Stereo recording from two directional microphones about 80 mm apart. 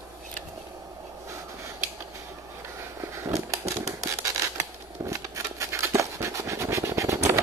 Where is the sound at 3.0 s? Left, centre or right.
Right.